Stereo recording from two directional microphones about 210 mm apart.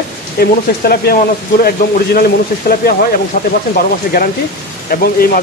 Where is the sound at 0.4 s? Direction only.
45° left (ahead or behind).